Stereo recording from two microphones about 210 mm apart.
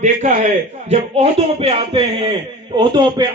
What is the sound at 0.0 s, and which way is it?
A man's voice, 35° right (ahead or behind).